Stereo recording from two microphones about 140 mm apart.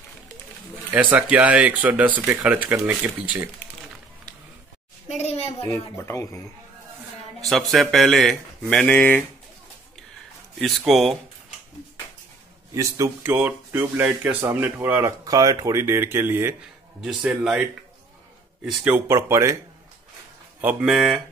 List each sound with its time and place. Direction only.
1.3 s speech: 10° right (ahead or behind)
5.0 s a sound: 50° left (ahead or behind)
5.7 s speech: 15° left (ahead or behind)
7.4 s speech: centre (ahead or behind)
10.8 s speech: centre (ahead or behind)
12.7 s speech: 20° right (ahead or behind)
17.0 s speech: 5° right (ahead or behind)
18.9 s speech: 20° right (ahead or behind)
20.6 s speech: 5° right (ahead or behind)